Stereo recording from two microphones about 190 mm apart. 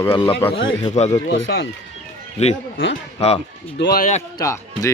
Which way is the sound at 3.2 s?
35° left (ahead or behind).